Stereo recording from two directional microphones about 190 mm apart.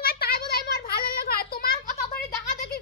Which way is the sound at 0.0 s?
55° left (ahead or behind).